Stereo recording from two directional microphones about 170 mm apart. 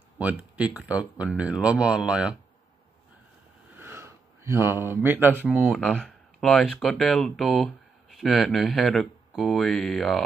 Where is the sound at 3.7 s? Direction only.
15° right (ahead or behind).